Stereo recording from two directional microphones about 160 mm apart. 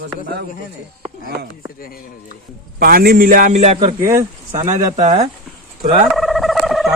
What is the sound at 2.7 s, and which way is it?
Speech, 70° right (ahead or behind).